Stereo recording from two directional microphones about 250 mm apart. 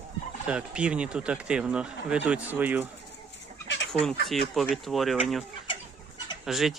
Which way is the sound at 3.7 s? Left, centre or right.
Left.